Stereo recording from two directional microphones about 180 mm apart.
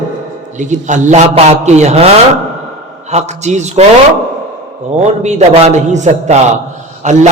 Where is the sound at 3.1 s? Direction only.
40° right (ahead or behind).